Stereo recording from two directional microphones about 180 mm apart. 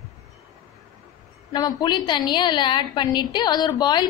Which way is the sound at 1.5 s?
25° left (ahead or behind).